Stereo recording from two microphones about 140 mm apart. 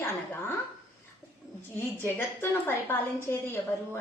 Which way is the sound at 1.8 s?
15° left (ahead or behind).